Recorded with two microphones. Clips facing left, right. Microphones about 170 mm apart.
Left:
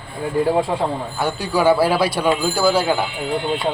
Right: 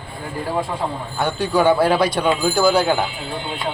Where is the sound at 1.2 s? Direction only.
10° left (ahead or behind).